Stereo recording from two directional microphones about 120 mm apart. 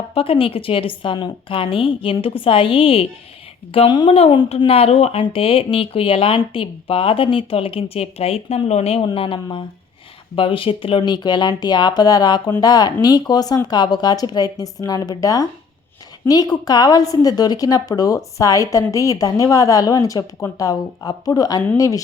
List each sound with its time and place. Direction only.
0.1 s speech: 50° left (ahead or behind)
9.1 s a woman's voice: 50° left (ahead or behind); by 22.0 s 25° left (ahead or behind)